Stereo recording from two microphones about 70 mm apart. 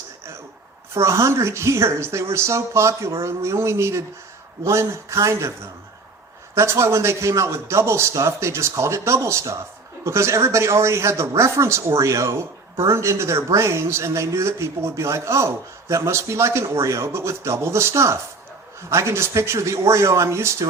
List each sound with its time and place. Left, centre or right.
0.9 s speech: right
6.6 s speech: right